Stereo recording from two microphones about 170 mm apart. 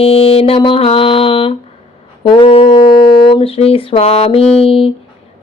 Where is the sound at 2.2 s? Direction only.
30° left (ahead or behind).